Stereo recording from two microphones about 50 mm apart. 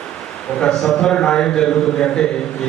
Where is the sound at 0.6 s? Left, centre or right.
Centre.